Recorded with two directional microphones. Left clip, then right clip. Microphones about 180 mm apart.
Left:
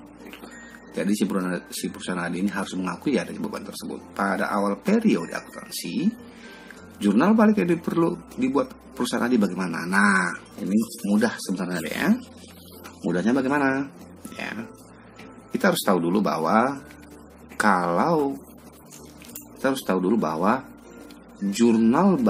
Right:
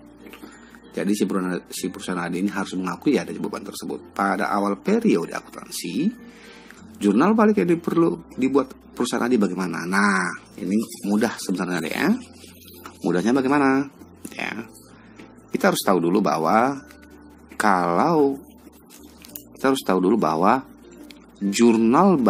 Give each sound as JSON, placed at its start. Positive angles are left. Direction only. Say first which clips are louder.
{"t": 0.9, "sound": "speech", "louder": "right 2 dB", "side_deg": -30}
{"t": 7.0, "sound": "speech", "louder": "right 2 dB", "side_deg": -35}
{"t": 13.1, "sound": "speech", "louder": "right 3 dB", "side_deg": -40}
{"t": 14.3, "sound": "a sound", "louder": "right 3 dB", "side_deg": -40}
{"t": 15.5, "sound": "speech", "louder": "right 2 dB", "side_deg": -35}
{"t": 19.6, "sound": "speech", "louder": "right 4 dB", "side_deg": -40}